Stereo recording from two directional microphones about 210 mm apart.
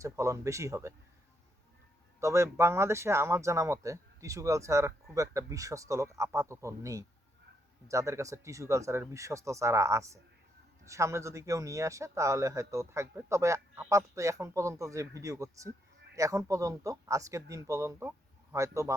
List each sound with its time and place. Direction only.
0.0 s speech: 15° right (ahead or behind)
2.2 s speech: 15° right (ahead or behind)